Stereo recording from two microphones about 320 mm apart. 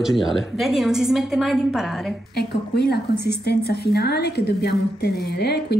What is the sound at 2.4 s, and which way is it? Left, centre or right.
A woman's voice, left.